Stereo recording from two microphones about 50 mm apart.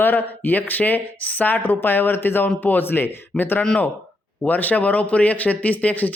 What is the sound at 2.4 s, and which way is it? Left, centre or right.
A man's voice, left.